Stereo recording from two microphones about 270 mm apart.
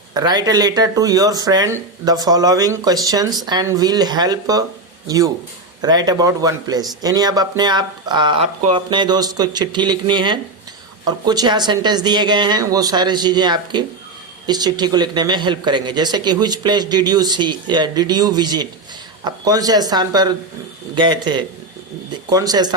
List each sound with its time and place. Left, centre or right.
0.1 s speech: centre